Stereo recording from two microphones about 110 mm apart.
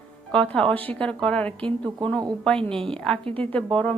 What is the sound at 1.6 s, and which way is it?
Speech, 50° right (ahead or behind).